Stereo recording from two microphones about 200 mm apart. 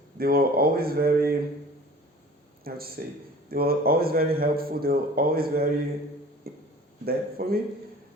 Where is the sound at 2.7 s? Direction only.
50° right (ahead or behind).